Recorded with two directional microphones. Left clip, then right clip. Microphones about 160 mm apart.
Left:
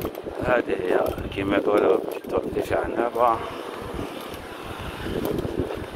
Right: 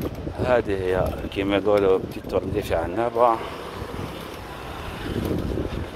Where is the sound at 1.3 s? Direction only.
75° right (ahead or behind).